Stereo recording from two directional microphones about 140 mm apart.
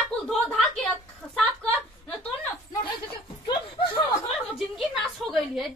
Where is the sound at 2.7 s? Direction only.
30° left (ahead or behind).